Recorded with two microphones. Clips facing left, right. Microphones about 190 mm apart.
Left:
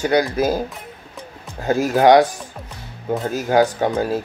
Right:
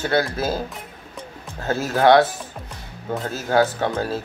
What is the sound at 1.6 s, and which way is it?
Speech, 15° left (ahead or behind).